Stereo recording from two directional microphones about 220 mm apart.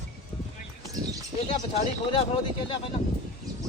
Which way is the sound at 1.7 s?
30° left (ahead or behind).